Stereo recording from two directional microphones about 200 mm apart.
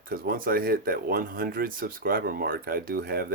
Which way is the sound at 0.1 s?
45° right (ahead or behind).